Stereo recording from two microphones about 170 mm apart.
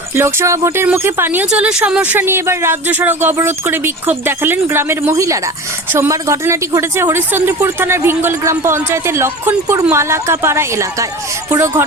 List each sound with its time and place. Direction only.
0.2 s speech: 15° right (ahead or behind)